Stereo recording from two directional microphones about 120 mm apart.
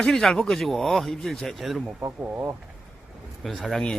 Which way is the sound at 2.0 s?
20° right (ahead or behind).